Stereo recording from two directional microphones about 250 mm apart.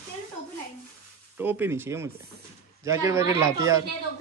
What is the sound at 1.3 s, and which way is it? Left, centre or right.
Speech, centre.